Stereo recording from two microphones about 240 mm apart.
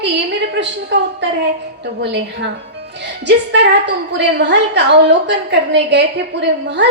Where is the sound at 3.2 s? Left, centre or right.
Right.